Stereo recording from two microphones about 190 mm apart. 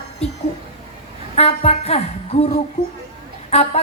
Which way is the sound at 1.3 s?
35° left (ahead or behind).